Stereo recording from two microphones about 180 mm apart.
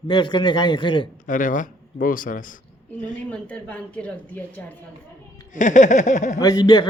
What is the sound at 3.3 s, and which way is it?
A woman's voice, 5° left (ahead or behind).